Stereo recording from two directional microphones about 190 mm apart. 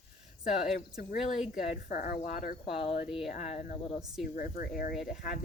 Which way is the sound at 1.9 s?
50° left (ahead or behind).